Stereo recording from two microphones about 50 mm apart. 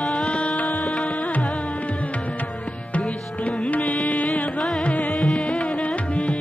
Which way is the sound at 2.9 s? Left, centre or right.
Left.